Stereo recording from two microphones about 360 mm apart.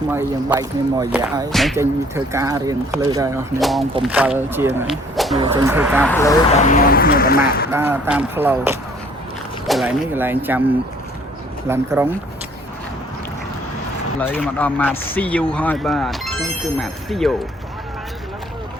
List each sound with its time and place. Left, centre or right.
0.1 s speech: centre
5.4 s speech: centre
6.1 s speech: centre
7.7 s speech: centre
11.7 s speech: centre
14.2 s speech: centre